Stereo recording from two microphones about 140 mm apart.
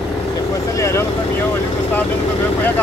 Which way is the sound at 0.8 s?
20° left (ahead or behind).